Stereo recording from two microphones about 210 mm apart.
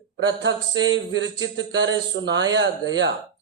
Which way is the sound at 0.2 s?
60° right (ahead or behind).